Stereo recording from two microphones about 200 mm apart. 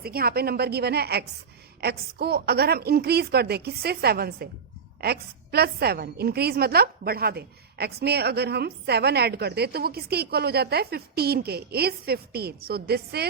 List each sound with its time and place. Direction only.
0.0 s a woman's voice: 50° right (ahead or behind)